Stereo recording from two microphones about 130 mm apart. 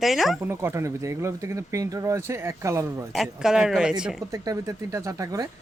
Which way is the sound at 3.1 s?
Centre (ahead or behind).